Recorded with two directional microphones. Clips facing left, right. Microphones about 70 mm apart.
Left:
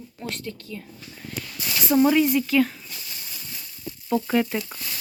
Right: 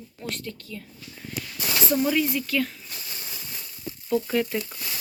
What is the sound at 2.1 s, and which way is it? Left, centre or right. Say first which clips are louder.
Speech: left 5 dB; centre.